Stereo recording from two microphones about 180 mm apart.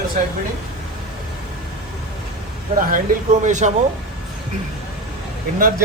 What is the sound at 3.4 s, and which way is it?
Speech, 40° right (ahead or behind).